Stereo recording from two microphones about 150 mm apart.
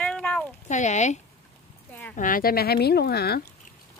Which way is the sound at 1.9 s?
10° left (ahead or behind).